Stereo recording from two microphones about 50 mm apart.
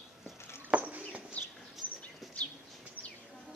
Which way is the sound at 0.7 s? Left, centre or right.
Right.